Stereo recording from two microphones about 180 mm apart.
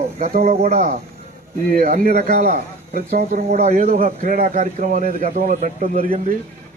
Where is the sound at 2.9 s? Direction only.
50° right (ahead or behind).